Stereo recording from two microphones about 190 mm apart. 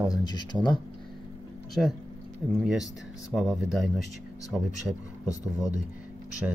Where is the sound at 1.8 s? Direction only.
5° left (ahead or behind).